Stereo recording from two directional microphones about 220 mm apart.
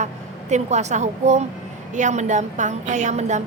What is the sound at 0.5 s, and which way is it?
Speech, 30° right (ahead or behind).